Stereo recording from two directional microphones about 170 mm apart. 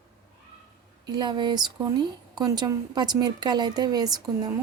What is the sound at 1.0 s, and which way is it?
A woman's voice, 25° right (ahead or behind).